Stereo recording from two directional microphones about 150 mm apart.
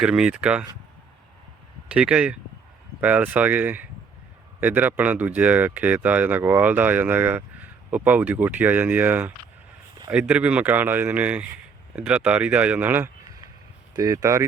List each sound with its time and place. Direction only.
0.0 s speech: 5° right (ahead or behind)
1.9 s speech: 5° right (ahead or behind)